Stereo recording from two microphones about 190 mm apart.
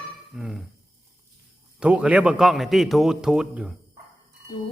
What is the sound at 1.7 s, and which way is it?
A man's voice, 5° right (ahead or behind).